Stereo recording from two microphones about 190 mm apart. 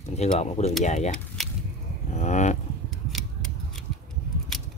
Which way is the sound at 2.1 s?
40° left (ahead or behind).